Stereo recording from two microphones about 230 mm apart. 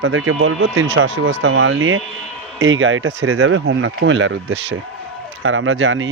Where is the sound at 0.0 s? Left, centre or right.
Right.